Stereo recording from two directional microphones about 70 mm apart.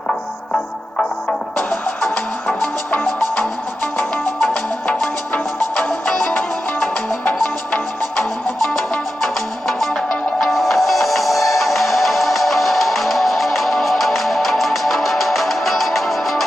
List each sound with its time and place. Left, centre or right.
0.1 s music: centre
2.5 s music: centre
3.1 s music: centre
5.9 s music: centre
9.2 s music: centre